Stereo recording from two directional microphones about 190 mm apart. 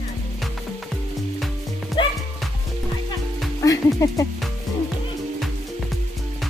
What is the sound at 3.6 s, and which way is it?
Music, 20° left (ahead or behind).